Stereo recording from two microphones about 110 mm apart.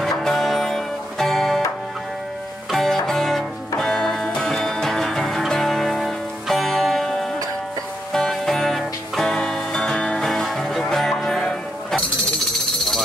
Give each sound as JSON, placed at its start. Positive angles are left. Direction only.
{"t": 0.0, "sound": "music", "side_deg": 5}
{"t": 2.7, "sound": "music", "side_deg": 0}